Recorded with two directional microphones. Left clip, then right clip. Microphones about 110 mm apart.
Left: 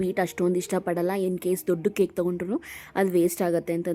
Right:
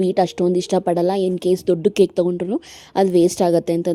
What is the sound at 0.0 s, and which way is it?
A woman's voice, 30° right (ahead or behind).